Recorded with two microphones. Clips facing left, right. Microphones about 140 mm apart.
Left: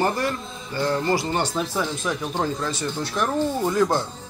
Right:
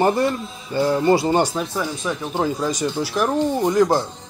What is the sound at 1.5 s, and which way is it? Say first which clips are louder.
Speech: right 1 dB; centre (ahead or behind).